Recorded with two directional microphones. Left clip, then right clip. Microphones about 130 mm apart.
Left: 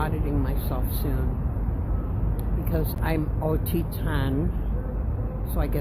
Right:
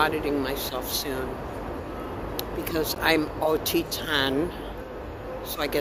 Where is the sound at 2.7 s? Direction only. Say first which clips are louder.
Right 6 dB; 20° right (ahead or behind).